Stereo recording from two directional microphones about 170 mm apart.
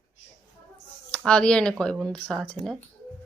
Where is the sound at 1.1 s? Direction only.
5° left (ahead or behind).